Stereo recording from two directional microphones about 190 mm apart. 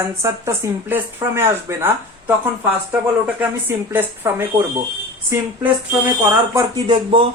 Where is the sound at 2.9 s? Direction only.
10° right (ahead or behind).